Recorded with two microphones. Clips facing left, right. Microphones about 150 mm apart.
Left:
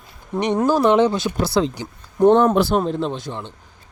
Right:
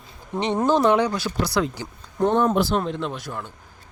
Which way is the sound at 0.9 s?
20° left (ahead or behind).